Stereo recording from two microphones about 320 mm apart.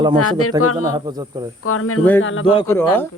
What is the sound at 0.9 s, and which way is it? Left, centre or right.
Speech, centre.